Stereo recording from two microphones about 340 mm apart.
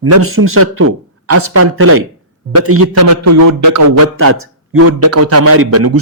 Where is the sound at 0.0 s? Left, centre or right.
Right.